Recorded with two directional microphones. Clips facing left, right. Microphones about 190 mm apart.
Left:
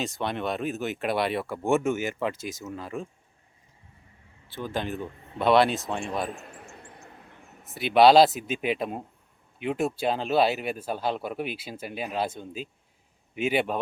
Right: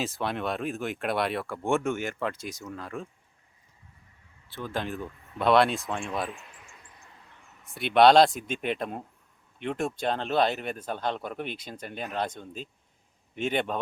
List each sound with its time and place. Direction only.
0.0 s speech: centre (ahead or behind)
4.4 s speech: centre (ahead or behind)
4.9 s speech: 30° left (ahead or behind)
5.4 s speech: centre (ahead or behind)
6.3 s a sound: 45° left (ahead or behind)
7.7 s speech: centre (ahead or behind)